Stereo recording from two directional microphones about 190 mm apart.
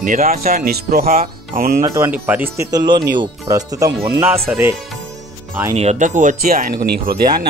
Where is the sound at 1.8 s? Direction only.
15° right (ahead or behind).